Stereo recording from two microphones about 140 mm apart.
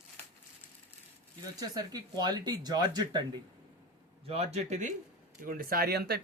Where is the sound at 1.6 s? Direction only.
25° right (ahead or behind).